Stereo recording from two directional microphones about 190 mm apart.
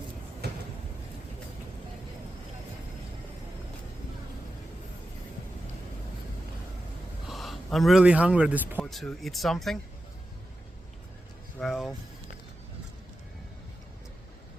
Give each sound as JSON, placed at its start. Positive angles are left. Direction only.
{"t": 0.4, "sound": "a sound", "side_deg": -60}
{"t": 7.3, "sound": "a man's voice", "side_deg": 0}
{"t": 11.6, "sound": "vehicle", "side_deg": 0}